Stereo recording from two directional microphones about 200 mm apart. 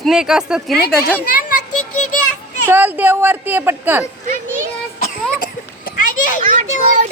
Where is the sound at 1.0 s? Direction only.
45° left (ahead or behind).